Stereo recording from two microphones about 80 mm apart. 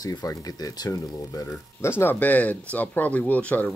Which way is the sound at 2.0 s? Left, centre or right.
Left.